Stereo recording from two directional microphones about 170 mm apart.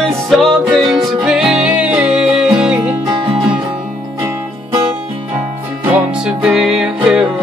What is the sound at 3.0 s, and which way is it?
Music, 30° right (ahead or behind).